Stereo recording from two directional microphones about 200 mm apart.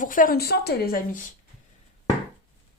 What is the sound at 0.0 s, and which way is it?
Speech, 40° left (ahead or behind).